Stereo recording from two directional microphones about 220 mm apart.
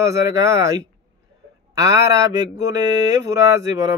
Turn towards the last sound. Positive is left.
turn(degrees=-15)  # may be behind; listen again after turning